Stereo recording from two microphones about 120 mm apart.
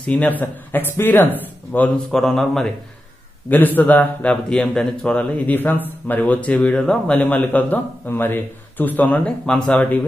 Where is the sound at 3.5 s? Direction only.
15° left (ahead or behind).